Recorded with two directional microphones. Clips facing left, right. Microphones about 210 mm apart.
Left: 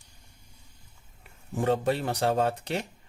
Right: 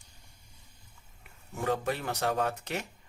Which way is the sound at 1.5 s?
30° left (ahead or behind).